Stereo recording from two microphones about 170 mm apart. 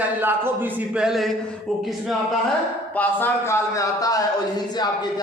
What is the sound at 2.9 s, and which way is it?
Speech, 10° left (ahead or behind).